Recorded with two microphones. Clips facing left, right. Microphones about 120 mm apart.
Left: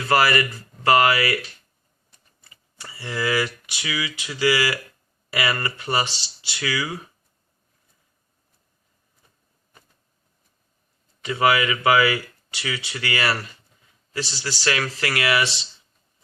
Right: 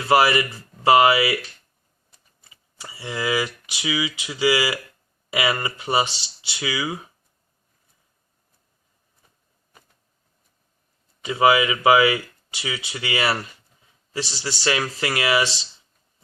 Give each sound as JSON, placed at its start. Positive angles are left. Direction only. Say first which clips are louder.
{"t": 0.0, "sound": "speech", "louder": "right 2 dB", "side_deg": -15}
{"t": 2.7, "sound": "speech", "louder": "even", "side_deg": -20}
{"t": 11.2, "sound": "speech", "louder": "right 2 dB", "side_deg": -20}